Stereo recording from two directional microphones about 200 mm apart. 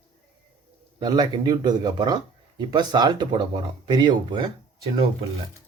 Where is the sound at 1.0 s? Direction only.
20° right (ahead or behind).